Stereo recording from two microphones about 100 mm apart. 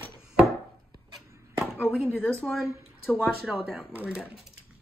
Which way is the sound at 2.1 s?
20° left (ahead or behind).